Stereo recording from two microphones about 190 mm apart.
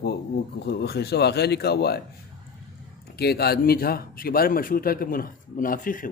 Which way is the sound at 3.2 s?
55° left (ahead or behind).